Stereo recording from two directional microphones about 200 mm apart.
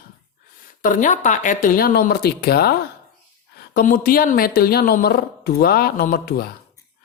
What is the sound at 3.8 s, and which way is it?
Speech, 45° left (ahead or behind).